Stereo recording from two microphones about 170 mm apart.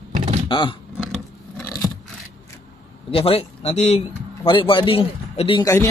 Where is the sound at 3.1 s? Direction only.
35° left (ahead or behind).